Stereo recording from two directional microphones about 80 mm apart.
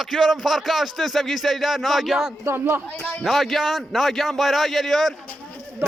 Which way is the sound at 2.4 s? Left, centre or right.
Right.